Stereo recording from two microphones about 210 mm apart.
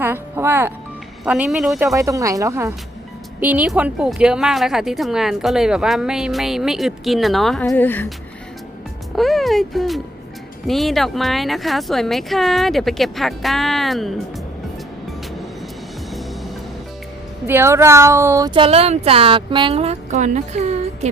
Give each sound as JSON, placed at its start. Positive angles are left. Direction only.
{"t": 0.0, "sound": "speech", "side_deg": -10}
{"t": 1.9, "sound": "a woman's voice", "side_deg": -15}
{"t": 9.1, "sound": "speech", "side_deg": 0}
{"t": 17.4, "sound": "speech", "side_deg": -10}